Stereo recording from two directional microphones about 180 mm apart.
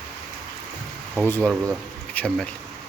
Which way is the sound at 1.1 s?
5° left (ahead or behind).